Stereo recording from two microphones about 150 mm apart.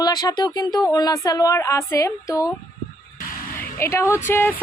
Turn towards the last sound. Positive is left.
turn(degrees=15)  # may be behind; listen again after turning